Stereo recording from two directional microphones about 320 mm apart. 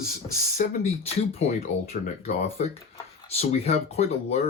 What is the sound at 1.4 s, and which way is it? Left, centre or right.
Speech, left.